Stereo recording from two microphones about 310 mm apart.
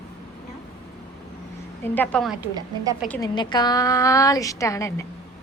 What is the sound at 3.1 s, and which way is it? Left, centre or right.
A woman's voice, centre.